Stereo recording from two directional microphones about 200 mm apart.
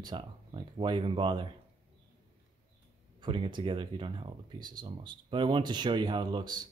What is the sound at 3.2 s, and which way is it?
Speech, 25° right (ahead or behind).